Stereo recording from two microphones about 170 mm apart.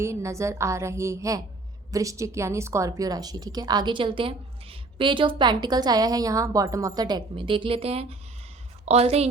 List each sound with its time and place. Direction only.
0.0 s a woman's voice: 15° right (ahead or behind); by 9.2 s 35° right (ahead or behind)